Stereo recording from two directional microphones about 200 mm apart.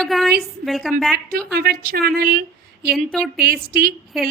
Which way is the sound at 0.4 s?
Centre (ahead or behind).